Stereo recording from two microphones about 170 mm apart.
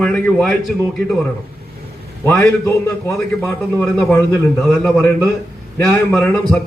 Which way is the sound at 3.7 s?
Centre (ahead or behind).